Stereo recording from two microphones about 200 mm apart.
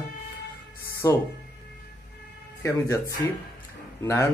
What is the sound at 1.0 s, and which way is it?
Speech, 15° left (ahead or behind).